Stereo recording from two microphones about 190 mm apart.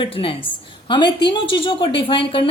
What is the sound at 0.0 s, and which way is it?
A woman's voice, 30° left (ahead or behind).